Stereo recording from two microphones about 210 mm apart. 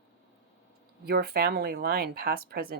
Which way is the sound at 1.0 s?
50° right (ahead or behind).